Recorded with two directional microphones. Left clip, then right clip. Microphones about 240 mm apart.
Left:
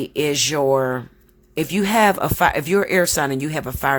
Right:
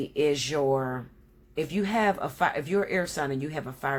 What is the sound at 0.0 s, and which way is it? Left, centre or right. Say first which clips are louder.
Speech: left 6 dB; left.